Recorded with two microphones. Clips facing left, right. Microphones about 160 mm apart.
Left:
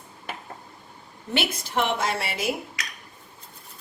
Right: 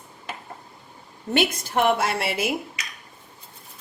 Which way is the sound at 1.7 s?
55° right (ahead or behind).